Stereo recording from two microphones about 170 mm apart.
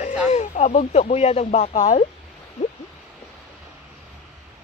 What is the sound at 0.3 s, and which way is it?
Speech, 40° left (ahead or behind).